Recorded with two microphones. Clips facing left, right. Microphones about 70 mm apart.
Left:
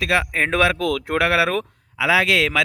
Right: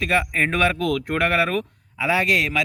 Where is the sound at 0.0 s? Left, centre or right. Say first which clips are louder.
Left 1 dB; left.